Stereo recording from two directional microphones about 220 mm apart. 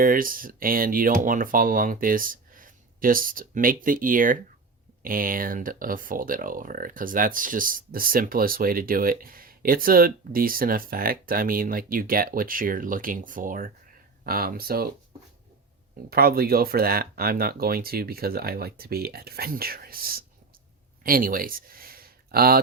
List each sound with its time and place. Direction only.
0.0 s speech: 40° right (ahead or behind)
16.0 s speech: 45° right (ahead or behind)
21.0 s a sound: 40° right (ahead or behind)